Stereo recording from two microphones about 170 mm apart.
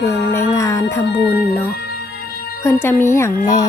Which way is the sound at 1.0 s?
85° left.